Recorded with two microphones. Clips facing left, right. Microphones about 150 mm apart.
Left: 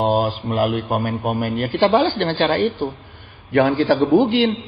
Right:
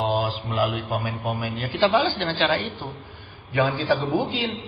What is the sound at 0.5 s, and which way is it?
A woman's voice, 50° left (ahead or behind).